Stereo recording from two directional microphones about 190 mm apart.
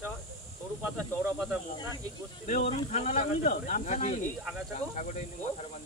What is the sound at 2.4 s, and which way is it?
Speech, 35° left (ahead or behind).